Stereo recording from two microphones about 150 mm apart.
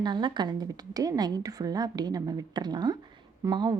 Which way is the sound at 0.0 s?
30° right (ahead or behind).